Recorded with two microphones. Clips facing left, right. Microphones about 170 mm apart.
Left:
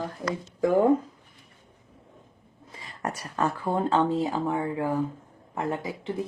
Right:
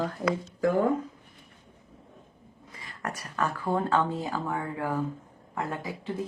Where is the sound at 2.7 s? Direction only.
25° left (ahead or behind).